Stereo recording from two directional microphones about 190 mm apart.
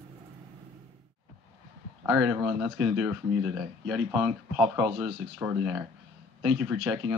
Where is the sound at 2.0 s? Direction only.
5° right (ahead or behind).